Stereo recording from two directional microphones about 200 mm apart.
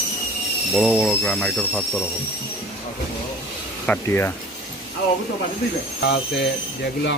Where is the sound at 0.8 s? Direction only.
Centre (ahead or behind).